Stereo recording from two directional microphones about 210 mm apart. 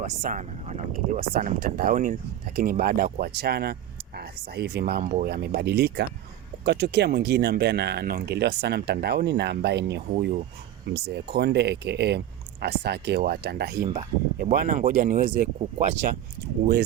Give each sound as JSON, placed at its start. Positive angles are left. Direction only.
{"t": 0.0, "sound": "speech", "side_deg": -35}